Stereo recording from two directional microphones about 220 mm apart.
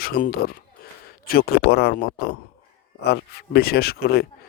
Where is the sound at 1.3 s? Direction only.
45° left (ahead or behind).